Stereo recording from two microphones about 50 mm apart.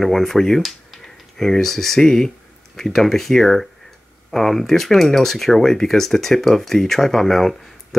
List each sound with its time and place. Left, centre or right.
0.0 s speech: centre